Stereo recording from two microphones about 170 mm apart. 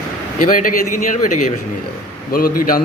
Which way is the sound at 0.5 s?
50° left (ahead or behind).